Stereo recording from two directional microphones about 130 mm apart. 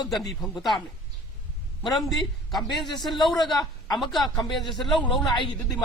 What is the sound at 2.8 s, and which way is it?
A man's voice, 35° left (ahead or behind).